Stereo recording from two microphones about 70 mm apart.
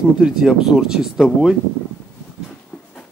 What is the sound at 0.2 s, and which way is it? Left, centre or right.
Speech, centre.